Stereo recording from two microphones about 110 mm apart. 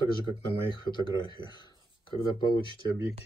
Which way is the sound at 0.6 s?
45° left (ahead or behind).